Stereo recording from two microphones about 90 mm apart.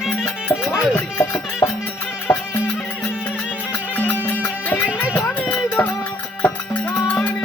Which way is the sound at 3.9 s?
15° left (ahead or behind).